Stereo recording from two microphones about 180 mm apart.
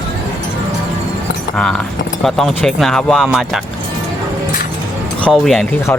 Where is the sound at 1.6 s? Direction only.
5° left (ahead or behind).